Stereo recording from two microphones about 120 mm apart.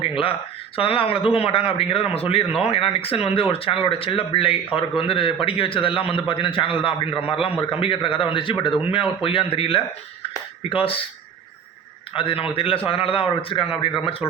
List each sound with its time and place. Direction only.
0.8 s speech: 50° left (ahead or behind)
12.1 s speech: 50° left (ahead or behind)